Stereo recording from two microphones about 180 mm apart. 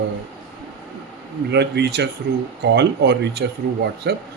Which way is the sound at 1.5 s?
70° right (ahead or behind).